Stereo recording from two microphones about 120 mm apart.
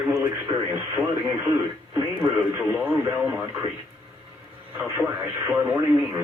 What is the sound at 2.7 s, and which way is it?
Speech, 20° right (ahead or behind).